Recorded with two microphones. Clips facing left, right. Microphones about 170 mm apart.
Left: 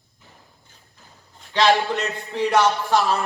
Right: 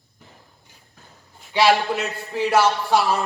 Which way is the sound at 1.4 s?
10° right (ahead or behind).